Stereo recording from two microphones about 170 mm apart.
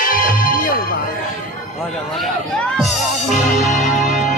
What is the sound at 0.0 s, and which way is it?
Music, 55° left (ahead or behind).